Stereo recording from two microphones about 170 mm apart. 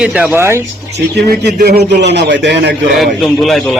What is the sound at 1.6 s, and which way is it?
A man's voice, 70° right (ahead or behind).